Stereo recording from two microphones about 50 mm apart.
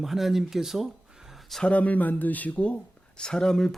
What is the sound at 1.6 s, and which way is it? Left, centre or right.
Speech, left.